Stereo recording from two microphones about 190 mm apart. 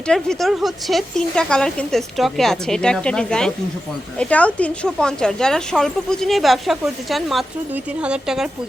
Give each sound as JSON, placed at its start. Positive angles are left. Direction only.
{"t": 0.1, "sound": "speech", "side_deg": 0}